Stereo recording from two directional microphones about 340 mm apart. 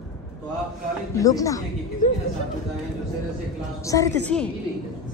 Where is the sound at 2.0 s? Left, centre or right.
Left.